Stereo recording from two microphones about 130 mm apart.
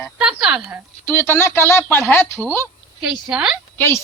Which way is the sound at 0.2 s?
5° right (ahead or behind).